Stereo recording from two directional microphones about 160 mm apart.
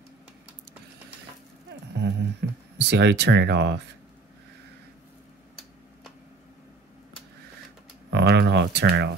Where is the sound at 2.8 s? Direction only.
90° right.